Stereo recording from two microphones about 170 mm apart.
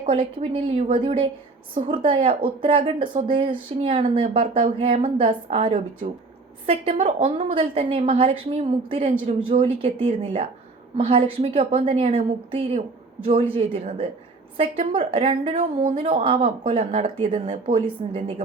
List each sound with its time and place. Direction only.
0.1 s speech: 30° right (ahead or behind)